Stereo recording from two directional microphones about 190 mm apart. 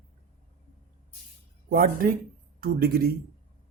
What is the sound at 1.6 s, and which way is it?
Speech, 50° right (ahead or behind).